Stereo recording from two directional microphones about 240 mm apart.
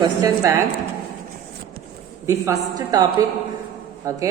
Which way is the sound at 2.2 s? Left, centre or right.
Centre.